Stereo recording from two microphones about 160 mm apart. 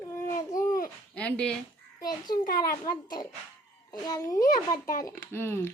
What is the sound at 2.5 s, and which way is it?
Speech, 70° left (ahead or behind).